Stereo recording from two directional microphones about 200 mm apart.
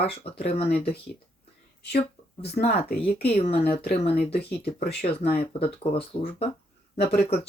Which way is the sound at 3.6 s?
50° left (ahead or behind).